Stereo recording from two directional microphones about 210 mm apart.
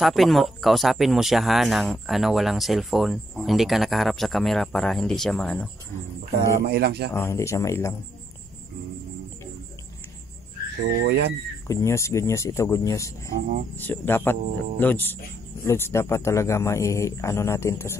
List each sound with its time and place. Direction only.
0.0 s speech: centre (ahead or behind)
6.7 s speech: 50° right (ahead or behind)
7.2 s a man's voice: 15° left (ahead or behind)
10.8 s speech: 55° right (ahead or behind)
11.6 s a man's voice: 15° left (ahead or behind)
13.3 s speech: 35° right (ahead or behind)
13.7 s a man's voice: 10° left (ahead or behind)